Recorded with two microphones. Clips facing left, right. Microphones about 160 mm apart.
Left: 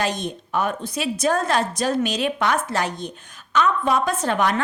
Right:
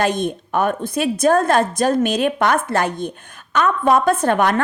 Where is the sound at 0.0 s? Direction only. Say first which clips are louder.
Right 6 dB; 55° right (ahead or behind).